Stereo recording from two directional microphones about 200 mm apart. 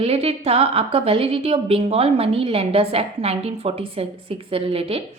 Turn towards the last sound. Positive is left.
turn(degrees=-30)  # may be behind; listen again after turning